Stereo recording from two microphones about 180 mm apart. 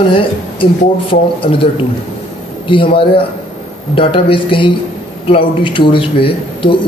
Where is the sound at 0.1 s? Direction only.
30° left (ahead or behind).